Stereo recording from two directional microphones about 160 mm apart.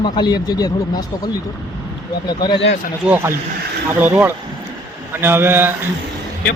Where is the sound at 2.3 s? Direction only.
30° left (ahead or behind).